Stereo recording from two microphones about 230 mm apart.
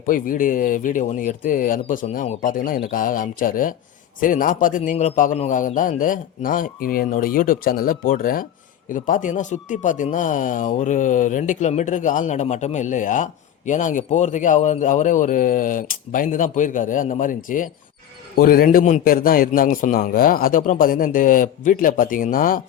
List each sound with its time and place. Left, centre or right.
0.0 s speech: left